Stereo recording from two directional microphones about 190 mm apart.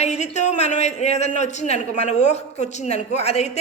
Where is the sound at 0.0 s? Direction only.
35° left (ahead or behind).